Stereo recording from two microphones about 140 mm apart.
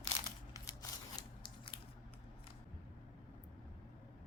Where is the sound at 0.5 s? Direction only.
25° left (ahead or behind).